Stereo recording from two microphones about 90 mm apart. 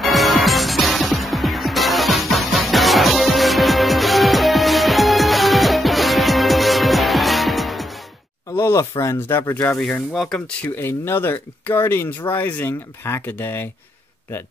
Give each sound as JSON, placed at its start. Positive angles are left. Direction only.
{"t": 0.0, "sound": "music", "side_deg": 0}
{"t": 8.5, "sound": "speech", "side_deg": 30}
{"t": 9.8, "sound": "speech", "side_deg": 10}
{"t": 10.8, "sound": "speech", "side_deg": 25}